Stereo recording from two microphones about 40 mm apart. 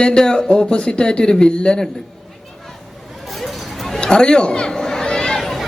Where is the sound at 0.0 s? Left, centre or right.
Centre.